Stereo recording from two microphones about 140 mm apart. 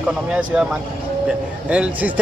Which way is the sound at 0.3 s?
5° right (ahead or behind).